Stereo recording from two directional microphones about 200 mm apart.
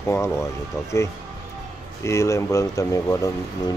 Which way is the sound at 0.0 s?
15° left (ahead or behind).